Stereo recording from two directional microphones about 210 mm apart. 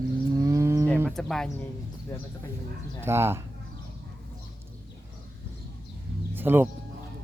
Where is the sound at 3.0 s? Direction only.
10° right (ahead or behind).